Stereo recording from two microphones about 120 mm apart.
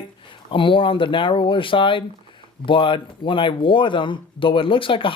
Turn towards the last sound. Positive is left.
turn(degrees=45)  # may be behind; listen again after turning